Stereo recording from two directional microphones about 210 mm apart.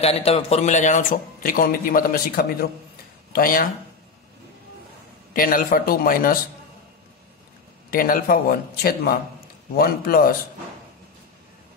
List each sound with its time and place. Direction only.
0.0 s a man's voice: 30° left (ahead or behind); by 3.6 s 45° left (ahead or behind)
5.3 s a man's voice: 40° left (ahead or behind)
7.9 s a man's voice: 45° left (ahead or behind)